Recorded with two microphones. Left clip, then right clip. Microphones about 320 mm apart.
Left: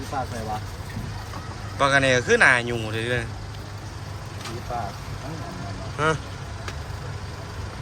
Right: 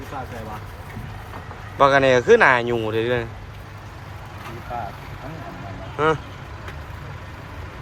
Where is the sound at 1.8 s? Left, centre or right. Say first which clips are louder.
Right 4 dB; centre.